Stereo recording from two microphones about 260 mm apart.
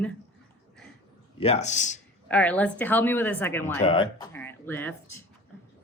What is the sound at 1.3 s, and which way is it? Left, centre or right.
Speech, left.